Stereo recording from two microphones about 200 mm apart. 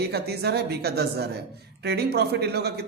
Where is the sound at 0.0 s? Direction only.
55° right (ahead or behind).